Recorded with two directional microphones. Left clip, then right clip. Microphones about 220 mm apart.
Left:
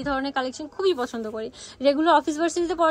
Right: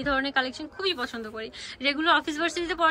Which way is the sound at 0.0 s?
10° left (ahead or behind).